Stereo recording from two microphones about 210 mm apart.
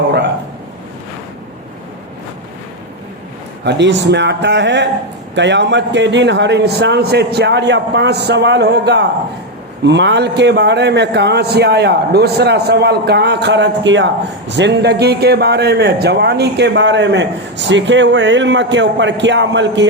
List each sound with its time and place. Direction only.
3.6 s a man's voice: 55° right (ahead or behind)